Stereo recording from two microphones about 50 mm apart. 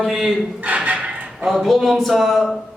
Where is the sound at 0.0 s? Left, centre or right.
Centre.